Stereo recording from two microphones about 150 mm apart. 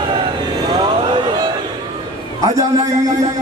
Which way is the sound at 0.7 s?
35° right (ahead or behind).